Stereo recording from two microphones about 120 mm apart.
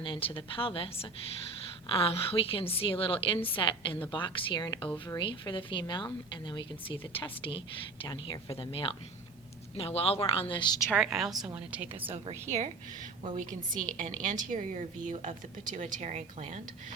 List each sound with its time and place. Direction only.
0.0 s speech: 45° left (ahead or behind)
10.9 s a woman's voice: centre (ahead or behind)
12.0 s a woman's voice: 50° right (ahead or behind)
12.3 s a woman's voice: 70° right (ahead or behind)
13.3 s a woman's voice: 90° right